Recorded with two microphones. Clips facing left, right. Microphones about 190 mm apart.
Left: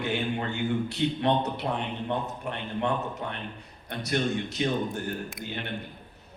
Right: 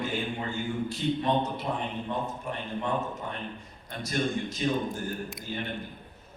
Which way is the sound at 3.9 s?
65° left (ahead or behind).